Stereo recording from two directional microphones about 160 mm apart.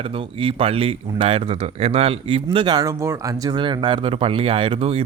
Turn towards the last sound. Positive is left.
turn(degrees=-40)  # may be behind; listen again after turning